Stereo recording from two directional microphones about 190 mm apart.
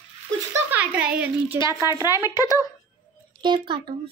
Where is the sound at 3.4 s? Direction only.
25° right (ahead or behind).